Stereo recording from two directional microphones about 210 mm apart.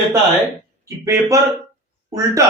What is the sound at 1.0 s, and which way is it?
Speech, 15° right (ahead or behind).